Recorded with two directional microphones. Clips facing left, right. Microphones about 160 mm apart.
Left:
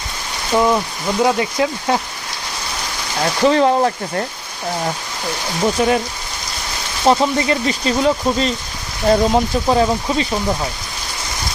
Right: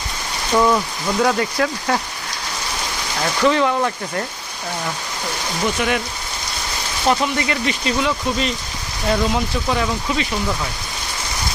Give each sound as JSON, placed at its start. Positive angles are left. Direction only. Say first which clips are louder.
{"t": 0.5, "sound": "speech", "louder": "left 1 dB", "side_deg": 20}
{"t": 3.4, "sound": "speech", "louder": "left 4 dB", "side_deg": 35}
{"t": 5.6, "sound": "speech", "louder": "left 5 dB", "side_deg": 30}
{"t": 7.0, "sound": "speech", "louder": "left 4 dB", "side_deg": 30}